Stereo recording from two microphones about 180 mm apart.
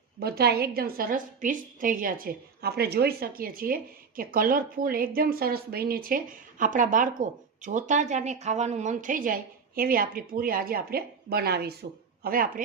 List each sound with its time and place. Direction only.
0.2 s a woman's voice: 60° right (ahead or behind)